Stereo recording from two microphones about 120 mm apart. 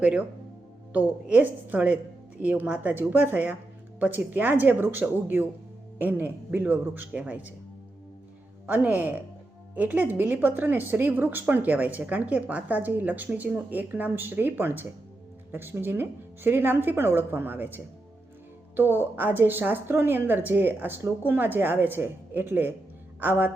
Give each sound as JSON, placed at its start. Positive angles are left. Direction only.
{"t": 0.0, "sound": "a woman's voice", "side_deg": -10}
{"t": 8.6, "sound": "a woman's voice", "side_deg": -15}
{"t": 18.8, "sound": "a woman's voice", "side_deg": -15}